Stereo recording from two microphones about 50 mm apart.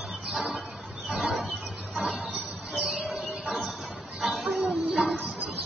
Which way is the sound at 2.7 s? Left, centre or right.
Centre.